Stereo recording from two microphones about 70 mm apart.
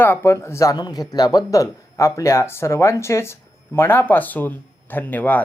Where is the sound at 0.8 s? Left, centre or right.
Left.